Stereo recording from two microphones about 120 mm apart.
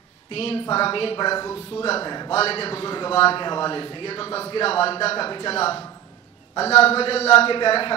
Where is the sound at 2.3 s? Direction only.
55° left (ahead or behind).